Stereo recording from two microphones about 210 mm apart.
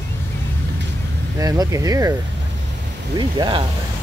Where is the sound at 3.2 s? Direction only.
20° right (ahead or behind).